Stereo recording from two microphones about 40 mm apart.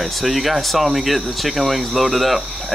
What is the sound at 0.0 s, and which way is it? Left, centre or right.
Speech, centre.